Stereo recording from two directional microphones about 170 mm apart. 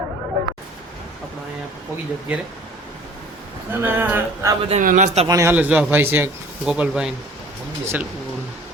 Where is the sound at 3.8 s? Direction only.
15° right (ahead or behind).